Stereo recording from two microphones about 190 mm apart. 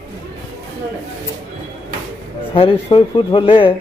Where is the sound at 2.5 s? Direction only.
30° left (ahead or behind).